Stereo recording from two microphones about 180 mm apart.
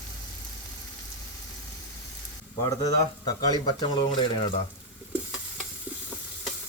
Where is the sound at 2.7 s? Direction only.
20° left (ahead or behind).